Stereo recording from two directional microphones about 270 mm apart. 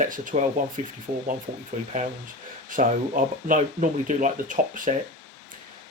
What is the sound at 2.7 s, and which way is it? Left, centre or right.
Speech, right.